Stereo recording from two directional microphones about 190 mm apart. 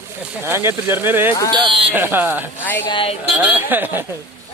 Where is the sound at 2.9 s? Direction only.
30° left (ahead or behind).